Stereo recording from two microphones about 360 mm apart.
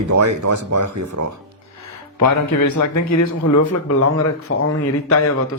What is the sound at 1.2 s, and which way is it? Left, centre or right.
Speech, right.